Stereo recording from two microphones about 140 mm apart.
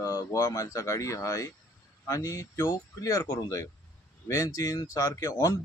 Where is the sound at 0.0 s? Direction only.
25° left (ahead or behind).